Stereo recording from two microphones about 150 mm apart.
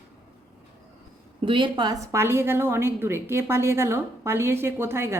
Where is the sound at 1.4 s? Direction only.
35° right (ahead or behind); by 5.2 s 15° right (ahead or behind).